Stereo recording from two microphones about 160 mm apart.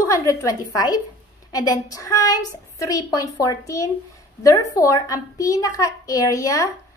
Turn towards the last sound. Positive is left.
turn(degrees=20)  # may be behind; listen again after turning